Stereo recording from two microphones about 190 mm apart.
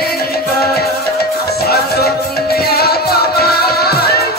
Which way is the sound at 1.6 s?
55° left (ahead or behind).